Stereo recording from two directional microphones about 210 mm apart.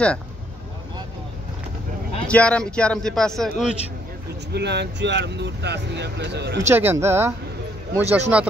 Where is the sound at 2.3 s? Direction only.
5° left (ahead or behind).